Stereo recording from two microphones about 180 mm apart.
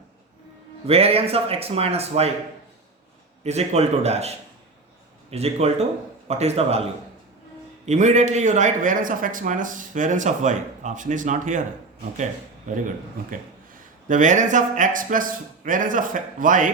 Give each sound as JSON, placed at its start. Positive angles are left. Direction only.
{"t": 0.9, "sound": "speech", "side_deg": -35}
{"t": 3.4, "sound": "speech", "side_deg": -35}
{"t": 7.9, "sound": "a man's voice", "side_deg": -40}
{"t": 12.7, "sound": "a man's voice", "side_deg": -45}
{"t": 14.1, "sound": "a man's voice", "side_deg": -45}